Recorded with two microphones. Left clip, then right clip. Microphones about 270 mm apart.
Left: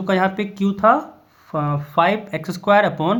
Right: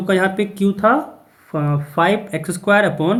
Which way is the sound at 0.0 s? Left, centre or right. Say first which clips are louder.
Right 2 dB; left.